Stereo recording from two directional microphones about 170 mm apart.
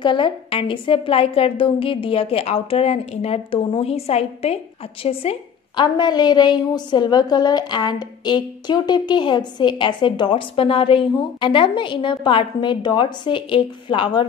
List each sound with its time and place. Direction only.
0.0 s a woman's voice: 30° left (ahead or behind)